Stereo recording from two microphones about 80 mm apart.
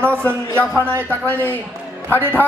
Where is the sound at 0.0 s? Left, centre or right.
Centre.